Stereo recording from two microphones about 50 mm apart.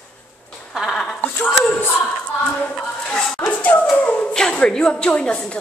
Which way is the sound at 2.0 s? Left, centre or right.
Left.